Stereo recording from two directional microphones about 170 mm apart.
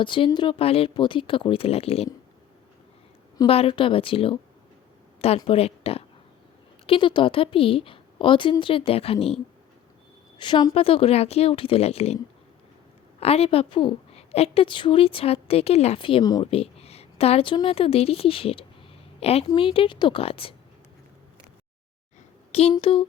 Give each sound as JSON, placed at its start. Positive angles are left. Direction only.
{"t": 0.0, "sound": "a woman's voice", "side_deg": 30}
{"t": 3.4, "sound": "a woman's voice", "side_deg": 35}
{"t": 5.4, "sound": "a woman's voice", "side_deg": 35}
{"t": 22.7, "sound": "a woman's voice", "side_deg": 30}